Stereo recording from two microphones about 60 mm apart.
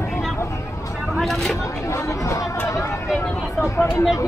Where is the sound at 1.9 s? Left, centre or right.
Left.